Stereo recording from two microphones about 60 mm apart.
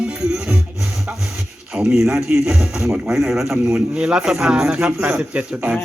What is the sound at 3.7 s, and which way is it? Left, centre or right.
A man's voice, centre.